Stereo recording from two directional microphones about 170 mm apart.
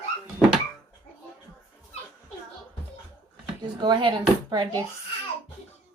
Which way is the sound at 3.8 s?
25° right (ahead or behind).